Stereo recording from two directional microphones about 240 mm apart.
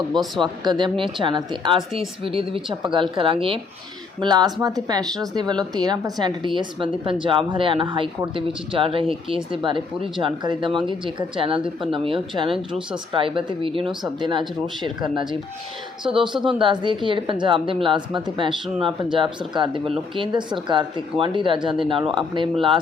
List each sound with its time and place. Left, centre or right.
0.1 s speech: centre
0.6 s speech: centre
16.3 s speech: centre